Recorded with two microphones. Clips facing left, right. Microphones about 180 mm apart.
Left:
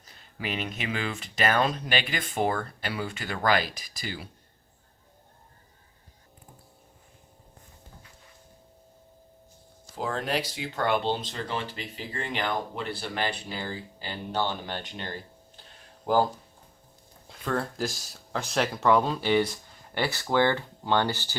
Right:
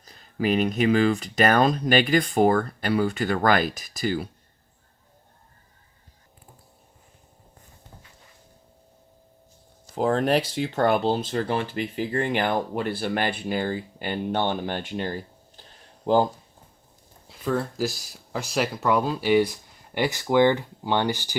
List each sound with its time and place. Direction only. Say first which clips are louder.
0.0 s speech: right 10 dB; 40° right (ahead or behind)
10.1 s speech: right 8 dB; 50° right (ahead or behind)
17.2 s speech: right 4 dB; 5° right (ahead or behind)